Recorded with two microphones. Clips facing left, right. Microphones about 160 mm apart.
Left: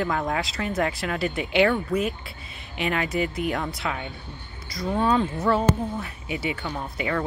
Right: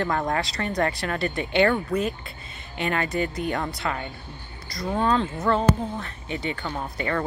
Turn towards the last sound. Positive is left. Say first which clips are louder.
# even
turn(degrees=5)  # may be behind; listen again after turning